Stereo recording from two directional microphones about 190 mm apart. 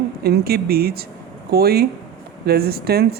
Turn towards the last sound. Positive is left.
turn(degrees=-55)  # may be behind; listen again after turning